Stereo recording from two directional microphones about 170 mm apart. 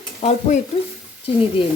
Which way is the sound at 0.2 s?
30° left (ahead or behind).